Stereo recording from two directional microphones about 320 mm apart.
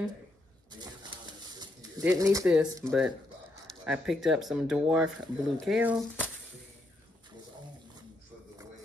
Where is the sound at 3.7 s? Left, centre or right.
Centre.